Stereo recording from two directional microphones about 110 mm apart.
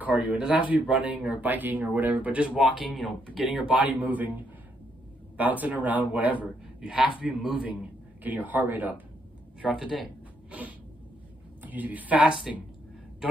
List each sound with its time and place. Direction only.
0.0 s speech: 10° right (ahead or behind)
5.4 s a man's voice: 15° right (ahead or behind)
11.6 s speech: 15° right (ahead or behind)